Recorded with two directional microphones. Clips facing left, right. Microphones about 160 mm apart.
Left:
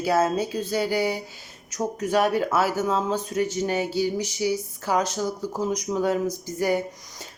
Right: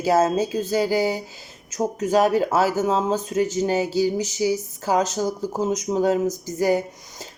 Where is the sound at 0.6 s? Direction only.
40° right (ahead or behind).